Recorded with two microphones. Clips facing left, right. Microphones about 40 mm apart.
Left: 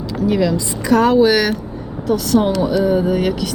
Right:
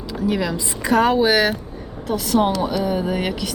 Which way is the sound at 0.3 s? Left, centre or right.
Centre.